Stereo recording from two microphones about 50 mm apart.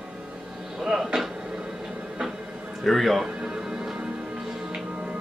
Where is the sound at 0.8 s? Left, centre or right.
Centre.